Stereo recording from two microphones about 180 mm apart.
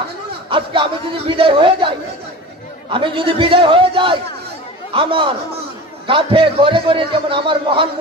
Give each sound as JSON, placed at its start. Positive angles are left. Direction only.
{"t": 0.5, "sound": "a man's voice", "side_deg": -30}
{"t": 2.9, "sound": "a man's voice", "side_deg": -30}